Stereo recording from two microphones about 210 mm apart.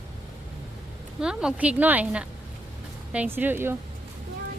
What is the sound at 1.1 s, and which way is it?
A woman's voice, 5° right (ahead or behind).